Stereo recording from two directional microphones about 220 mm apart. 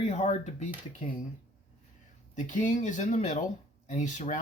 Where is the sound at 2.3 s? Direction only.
35° left (ahead or behind).